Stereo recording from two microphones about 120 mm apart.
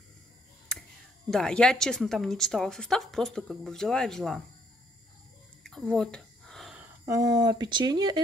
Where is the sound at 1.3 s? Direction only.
5° left (ahead or behind).